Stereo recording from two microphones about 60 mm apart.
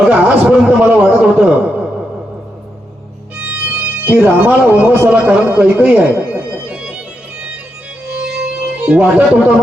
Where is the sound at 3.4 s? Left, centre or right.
Right.